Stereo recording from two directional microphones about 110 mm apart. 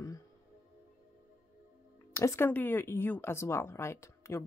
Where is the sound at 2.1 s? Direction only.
25° left (ahead or behind).